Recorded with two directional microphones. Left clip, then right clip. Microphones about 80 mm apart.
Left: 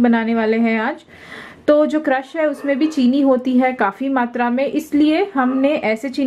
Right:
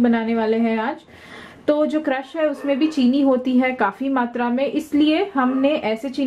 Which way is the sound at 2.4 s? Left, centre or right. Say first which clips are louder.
Left 2 dB; left.